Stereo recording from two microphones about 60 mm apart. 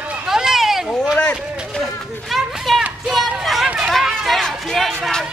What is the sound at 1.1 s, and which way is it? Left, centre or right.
Speech, centre.